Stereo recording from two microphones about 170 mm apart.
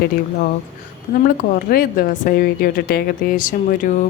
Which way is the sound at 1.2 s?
60° left (ahead or behind).